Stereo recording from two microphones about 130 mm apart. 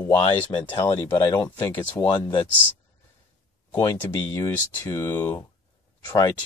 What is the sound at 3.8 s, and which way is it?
Speech, 25° left (ahead or behind).